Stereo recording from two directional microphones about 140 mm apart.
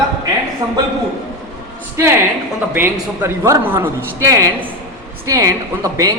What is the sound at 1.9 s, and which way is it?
A woman's voice, 15° right (ahead or behind).